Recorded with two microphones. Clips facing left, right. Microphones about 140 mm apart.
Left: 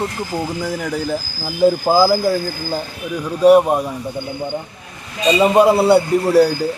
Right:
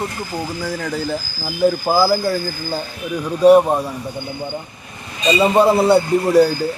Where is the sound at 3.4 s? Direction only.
5° left (ahead or behind).